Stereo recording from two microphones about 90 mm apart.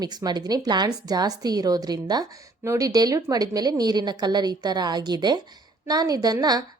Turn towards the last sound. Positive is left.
turn(degrees=-45)  # may be behind; listen again after turning